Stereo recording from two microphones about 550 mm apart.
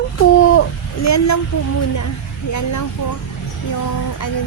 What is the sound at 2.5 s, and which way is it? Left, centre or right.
Vehicle, left.